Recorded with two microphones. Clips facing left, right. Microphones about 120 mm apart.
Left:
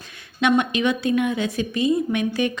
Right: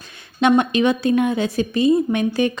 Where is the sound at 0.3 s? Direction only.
35° right (ahead or behind).